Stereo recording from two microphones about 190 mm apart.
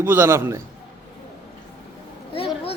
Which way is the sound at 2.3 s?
30° left (ahead or behind).